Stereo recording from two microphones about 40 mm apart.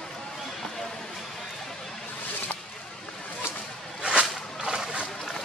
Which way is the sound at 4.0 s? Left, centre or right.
Right.